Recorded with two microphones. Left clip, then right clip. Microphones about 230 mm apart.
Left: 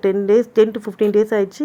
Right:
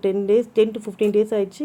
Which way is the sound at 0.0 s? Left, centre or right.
Centre.